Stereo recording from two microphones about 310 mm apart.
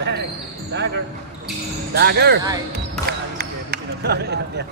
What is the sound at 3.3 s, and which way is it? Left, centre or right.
Basketball bounce, right.